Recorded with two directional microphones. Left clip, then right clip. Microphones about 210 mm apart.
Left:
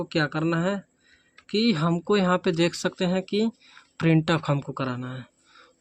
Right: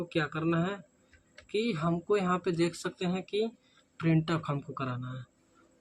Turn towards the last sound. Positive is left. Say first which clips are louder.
# left 7 dB
turn(degrees=45)  # may be behind; listen again after turning